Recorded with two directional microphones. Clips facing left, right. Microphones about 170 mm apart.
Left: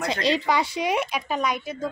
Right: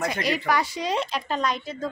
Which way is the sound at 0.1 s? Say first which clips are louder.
Left 2 dB; 25° left (ahead or behind).